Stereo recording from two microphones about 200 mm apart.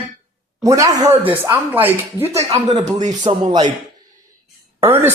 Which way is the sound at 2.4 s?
30° right (ahead or behind).